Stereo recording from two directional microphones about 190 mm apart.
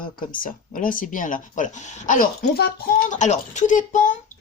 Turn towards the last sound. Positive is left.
turn(degrees=40)  # may be behind; listen again after turning